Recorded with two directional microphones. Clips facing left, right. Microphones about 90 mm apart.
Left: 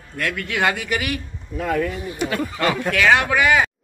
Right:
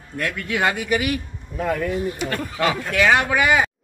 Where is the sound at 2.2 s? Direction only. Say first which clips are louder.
Left 1 dB; centre (ahead or behind).